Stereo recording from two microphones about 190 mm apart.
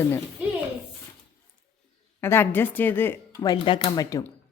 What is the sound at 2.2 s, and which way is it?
Speech, 10° left (ahead or behind).